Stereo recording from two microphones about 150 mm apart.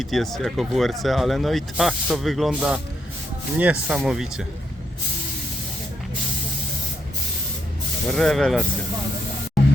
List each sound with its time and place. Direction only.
0.0 s speech: centre (ahead or behind)
8.1 s speech: 5° left (ahead or behind)